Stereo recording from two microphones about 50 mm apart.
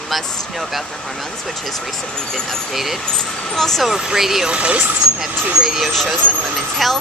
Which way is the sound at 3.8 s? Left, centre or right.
Centre.